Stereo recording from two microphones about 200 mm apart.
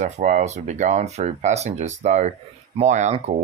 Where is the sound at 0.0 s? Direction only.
35° right (ahead or behind).